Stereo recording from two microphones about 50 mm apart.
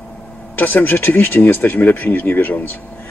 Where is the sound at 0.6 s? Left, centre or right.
Left.